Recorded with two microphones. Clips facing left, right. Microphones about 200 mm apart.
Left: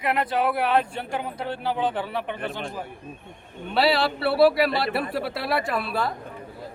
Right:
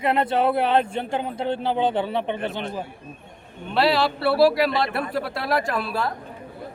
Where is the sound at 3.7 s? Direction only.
Centre (ahead or behind).